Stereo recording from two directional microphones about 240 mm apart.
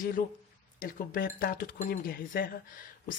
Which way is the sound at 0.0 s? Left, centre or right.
Left.